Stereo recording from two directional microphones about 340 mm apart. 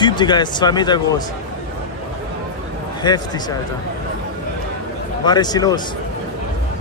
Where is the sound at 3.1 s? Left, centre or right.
Centre.